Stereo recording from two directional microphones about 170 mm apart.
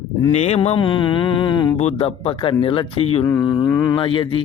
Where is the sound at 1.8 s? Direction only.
35° left (ahead or behind).